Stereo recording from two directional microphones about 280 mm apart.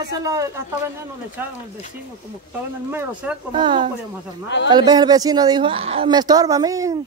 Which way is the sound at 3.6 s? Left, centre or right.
Centre.